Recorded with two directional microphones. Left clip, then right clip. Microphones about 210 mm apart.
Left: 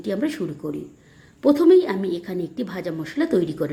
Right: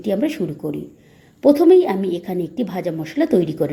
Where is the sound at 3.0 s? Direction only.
30° left (ahead or behind).